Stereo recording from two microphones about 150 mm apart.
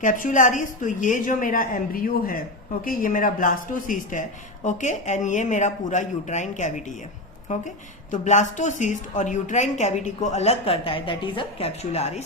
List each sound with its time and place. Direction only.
0.0 s a woman's voice: 60° left (ahead or behind); by 12.2 s 45° left (ahead or behind)